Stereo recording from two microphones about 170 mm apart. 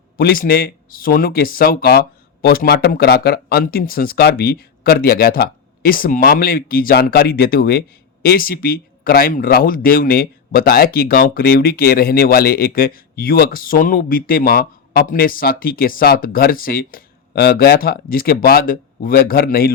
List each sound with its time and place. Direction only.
0.2 s speech: 60° left (ahead or behind)